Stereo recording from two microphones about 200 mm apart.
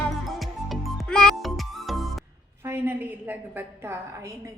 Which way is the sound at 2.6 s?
10° right (ahead or behind).